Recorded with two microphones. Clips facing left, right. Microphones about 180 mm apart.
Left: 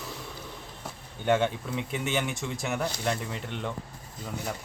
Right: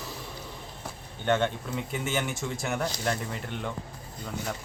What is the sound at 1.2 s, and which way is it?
Speech, 5° left (ahead or behind).